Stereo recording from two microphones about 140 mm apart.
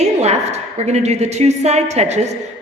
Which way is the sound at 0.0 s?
50° right (ahead or behind).